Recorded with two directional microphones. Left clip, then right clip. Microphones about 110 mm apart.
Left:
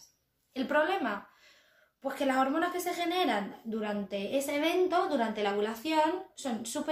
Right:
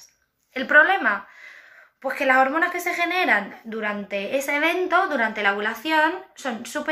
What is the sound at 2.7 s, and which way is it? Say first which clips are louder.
A woman's voice: right 8 dB; 35° left (ahead or behind).